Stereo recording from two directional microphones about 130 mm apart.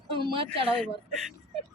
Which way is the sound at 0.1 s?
45° right (ahead or behind).